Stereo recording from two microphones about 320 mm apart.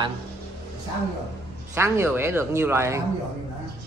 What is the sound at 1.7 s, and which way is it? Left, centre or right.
Speech, centre.